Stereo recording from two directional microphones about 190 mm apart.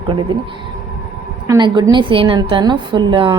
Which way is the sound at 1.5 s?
25° right (ahead or behind).